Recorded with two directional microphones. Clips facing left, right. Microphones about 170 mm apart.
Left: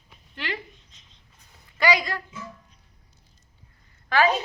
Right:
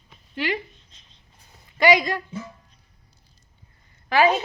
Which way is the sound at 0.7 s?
15° left (ahead or behind).